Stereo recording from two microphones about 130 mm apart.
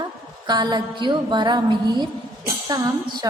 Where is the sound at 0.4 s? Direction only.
30° right (ahead or behind).